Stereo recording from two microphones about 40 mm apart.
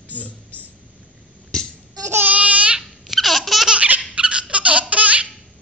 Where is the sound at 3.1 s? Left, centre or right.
Centre.